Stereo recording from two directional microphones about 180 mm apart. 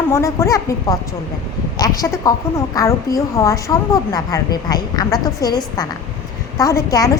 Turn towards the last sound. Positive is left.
turn(degrees=20)  # may be behind; listen again after turning